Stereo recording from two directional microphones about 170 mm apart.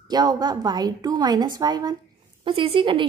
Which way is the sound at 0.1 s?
25° right (ahead or behind).